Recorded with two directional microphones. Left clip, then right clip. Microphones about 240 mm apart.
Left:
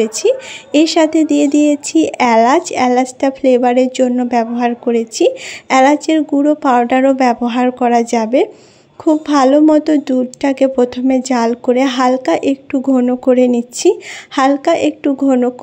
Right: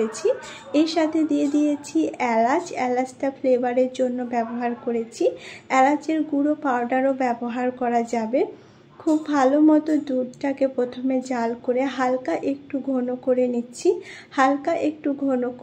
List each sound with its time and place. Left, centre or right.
0.0 s speech: left